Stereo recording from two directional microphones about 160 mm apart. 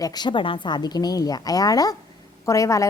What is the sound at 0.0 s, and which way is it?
A woman's voice, 25° left (ahead or behind).